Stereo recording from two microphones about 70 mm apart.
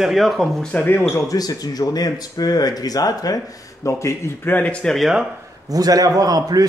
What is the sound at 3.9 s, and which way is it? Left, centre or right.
Speech, left.